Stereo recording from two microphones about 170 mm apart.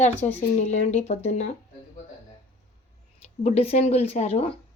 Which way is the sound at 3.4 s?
40° left (ahead or behind).